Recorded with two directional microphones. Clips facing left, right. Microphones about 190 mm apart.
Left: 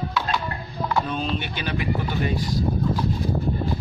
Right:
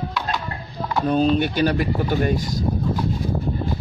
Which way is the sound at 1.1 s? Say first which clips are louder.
Right 9 dB; 40° right (ahead or behind).